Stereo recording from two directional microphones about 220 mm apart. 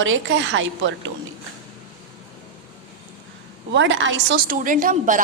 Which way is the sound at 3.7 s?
60° right (ahead or behind).